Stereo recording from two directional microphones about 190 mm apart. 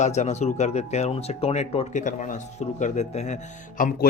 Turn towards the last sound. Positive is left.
turn(degrees=45)  # may be behind; listen again after turning